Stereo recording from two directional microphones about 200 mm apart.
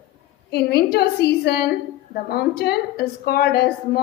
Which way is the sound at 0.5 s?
50° left (ahead or behind).